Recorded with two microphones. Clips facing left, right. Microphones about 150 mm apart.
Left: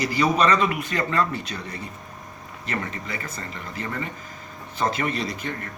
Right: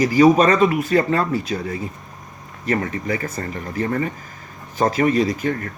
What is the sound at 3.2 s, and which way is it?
Speech, 40° right (ahead or behind).